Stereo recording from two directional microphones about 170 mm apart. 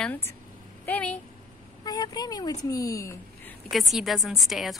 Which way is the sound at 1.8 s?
25° left (ahead or behind).